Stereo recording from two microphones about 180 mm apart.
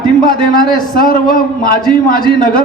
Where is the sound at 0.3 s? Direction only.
50° left (ahead or behind).